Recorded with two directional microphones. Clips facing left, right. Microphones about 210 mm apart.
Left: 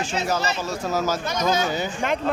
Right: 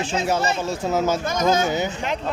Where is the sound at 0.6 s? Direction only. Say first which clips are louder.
Right 3 dB; 25° right (ahead or behind).